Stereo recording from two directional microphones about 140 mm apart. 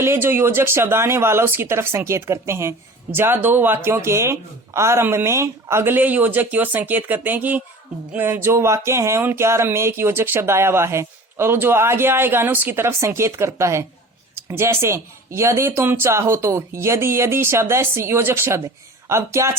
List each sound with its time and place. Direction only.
0.0 s speech: 15° right (ahead or behind)